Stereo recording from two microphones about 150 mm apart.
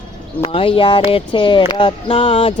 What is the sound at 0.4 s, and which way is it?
Speech, 40° left (ahead or behind).